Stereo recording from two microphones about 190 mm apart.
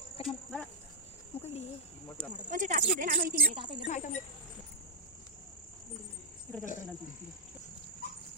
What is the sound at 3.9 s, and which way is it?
Speech, 40° left (ahead or behind).